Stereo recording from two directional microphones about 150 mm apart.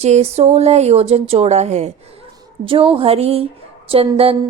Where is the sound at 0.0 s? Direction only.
45° right (ahead or behind).